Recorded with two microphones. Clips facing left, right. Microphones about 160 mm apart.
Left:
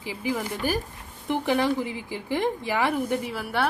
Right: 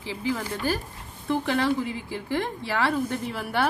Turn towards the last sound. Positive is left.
turn(degrees=0)  # may be behind; listen again after turning